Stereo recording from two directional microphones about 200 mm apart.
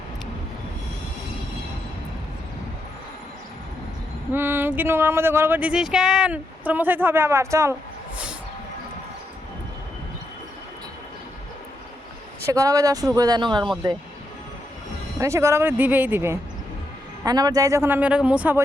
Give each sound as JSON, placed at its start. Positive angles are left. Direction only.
{"t": 4.3, "sound": "speech", "side_deg": -10}
{"t": 12.5, "sound": "speech", "side_deg": -15}
{"t": 15.2, "sound": "speech", "side_deg": -15}